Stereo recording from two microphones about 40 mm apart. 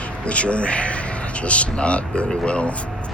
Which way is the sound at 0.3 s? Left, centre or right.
Left.